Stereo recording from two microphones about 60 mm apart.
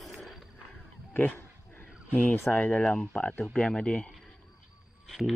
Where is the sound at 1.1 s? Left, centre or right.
Left.